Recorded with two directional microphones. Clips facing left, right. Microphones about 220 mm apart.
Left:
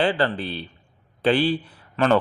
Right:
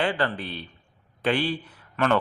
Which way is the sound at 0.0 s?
30° left (ahead or behind).